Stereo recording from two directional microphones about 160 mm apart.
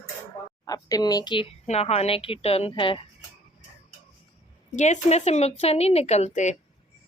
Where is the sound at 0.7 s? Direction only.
20° left (ahead or behind).